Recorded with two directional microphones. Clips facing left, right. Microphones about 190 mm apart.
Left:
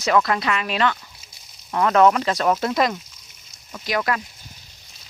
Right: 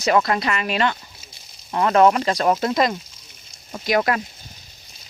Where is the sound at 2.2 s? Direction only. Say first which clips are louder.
Right 1 dB; 35° right (ahead or behind).